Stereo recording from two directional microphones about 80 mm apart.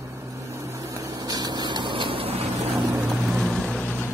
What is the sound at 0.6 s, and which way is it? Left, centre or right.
Vehicle, right.